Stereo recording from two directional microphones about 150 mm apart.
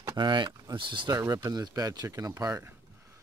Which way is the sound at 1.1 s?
20° right (ahead or behind).